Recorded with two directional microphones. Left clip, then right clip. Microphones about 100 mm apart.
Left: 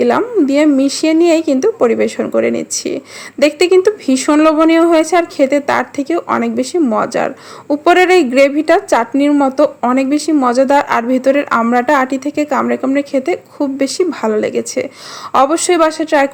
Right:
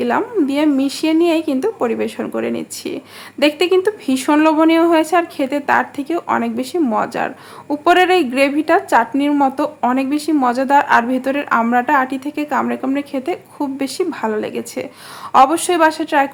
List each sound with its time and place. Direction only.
0.0 s speech: 35° left (ahead or behind)